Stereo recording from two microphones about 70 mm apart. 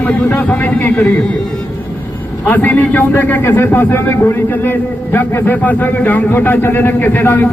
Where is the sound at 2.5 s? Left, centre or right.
Left.